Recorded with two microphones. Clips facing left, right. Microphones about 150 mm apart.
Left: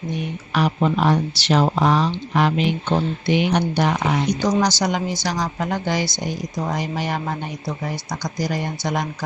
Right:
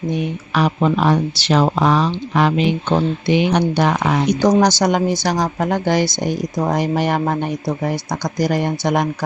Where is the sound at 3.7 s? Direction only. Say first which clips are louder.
Right 3 dB; 90° right.